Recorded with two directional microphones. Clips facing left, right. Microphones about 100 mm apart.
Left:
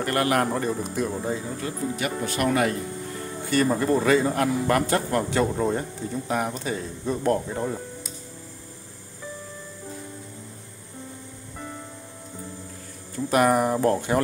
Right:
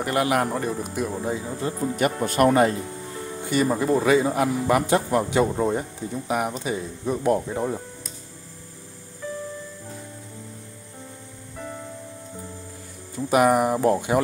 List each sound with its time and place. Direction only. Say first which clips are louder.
0.0 s speech: right 1 dB; 10° right (ahead or behind)
1.6 s speech: right 6 dB; 25° right (ahead or behind)
2.2 s speech: right 5 dB; 40° right (ahead or behind)
3.4 s a man's voice: even; 10° right (ahead or behind)
13.1 s a man's voice: right 2 dB; 10° right (ahead or behind)